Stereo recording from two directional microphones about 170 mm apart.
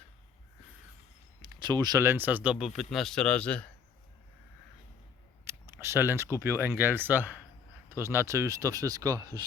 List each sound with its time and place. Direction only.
1.4 s speech: 25° right (ahead or behind); by 3.7 s 5° left (ahead or behind)
5.5 s a sound: 15° right (ahead or behind)
6.4 s speech: 15° right (ahead or behind)